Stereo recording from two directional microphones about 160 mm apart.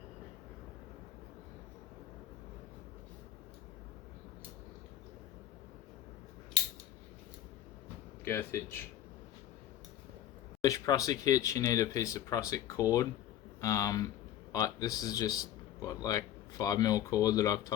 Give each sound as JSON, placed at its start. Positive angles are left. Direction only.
{"t": 8.2, "sound": "speech", "side_deg": 15}
{"t": 10.6, "sound": "speech", "side_deg": 20}